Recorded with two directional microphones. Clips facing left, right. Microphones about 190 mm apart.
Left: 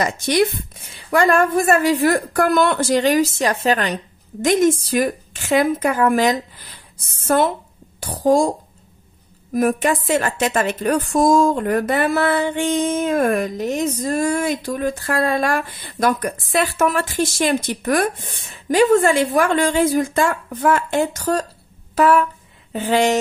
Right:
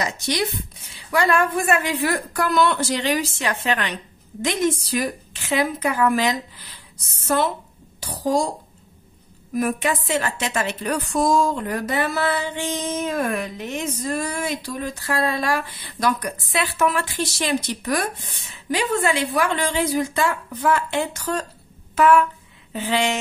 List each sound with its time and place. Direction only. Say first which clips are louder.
0.0 s a woman's voice: left 7 dB; 55° left (ahead or behind)
9.5 s a woman's voice: left 5 dB; 45° left (ahead or behind)
21.9 s a sound: left 1 dB; 35° left (ahead or behind)
22.7 s speech: left 5 dB; 45° left (ahead or behind)